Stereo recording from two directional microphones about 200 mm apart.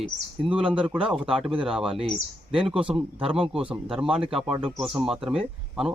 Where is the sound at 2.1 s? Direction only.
25° right (ahead or behind).